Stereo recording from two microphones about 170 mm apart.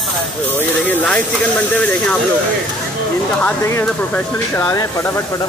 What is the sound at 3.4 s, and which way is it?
Speech, 10° left (ahead or behind).